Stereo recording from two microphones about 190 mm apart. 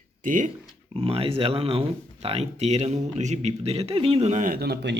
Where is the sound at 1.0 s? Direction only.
30° right (ahead or behind).